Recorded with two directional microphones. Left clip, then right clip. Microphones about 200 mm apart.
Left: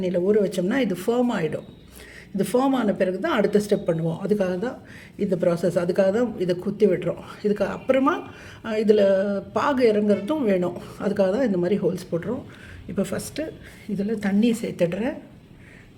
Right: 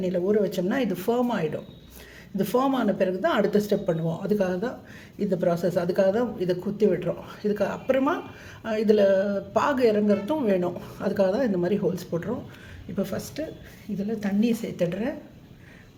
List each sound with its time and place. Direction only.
0.0 s speech: 20° left (ahead or behind)
13.0 s a woman's voice: 25° left (ahead or behind)